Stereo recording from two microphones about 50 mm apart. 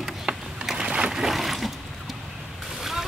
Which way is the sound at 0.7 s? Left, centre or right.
Centre.